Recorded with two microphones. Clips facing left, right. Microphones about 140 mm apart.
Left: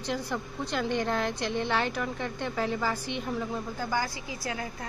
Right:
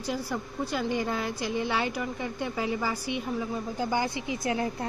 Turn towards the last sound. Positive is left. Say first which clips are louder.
# right 6 dB
turn(degrees=-25)  # may be behind; listen again after turning